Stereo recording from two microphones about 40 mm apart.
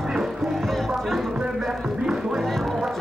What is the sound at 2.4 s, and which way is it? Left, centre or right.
Music, centre.